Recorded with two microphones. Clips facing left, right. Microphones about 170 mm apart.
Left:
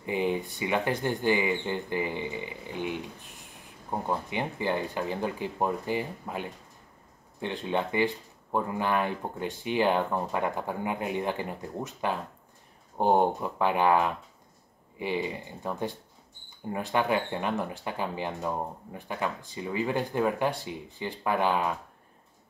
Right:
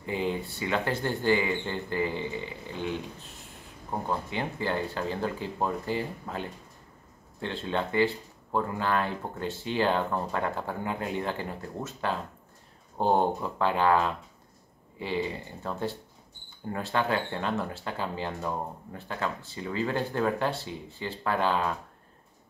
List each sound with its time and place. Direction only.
0.0 s speech: 15° left (ahead or behind)